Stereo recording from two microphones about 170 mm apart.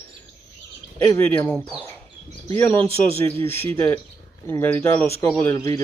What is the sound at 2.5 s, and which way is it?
Speech, 15° left (ahead or behind).